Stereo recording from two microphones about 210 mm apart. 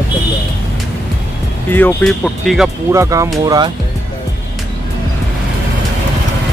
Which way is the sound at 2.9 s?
15° right (ahead or behind).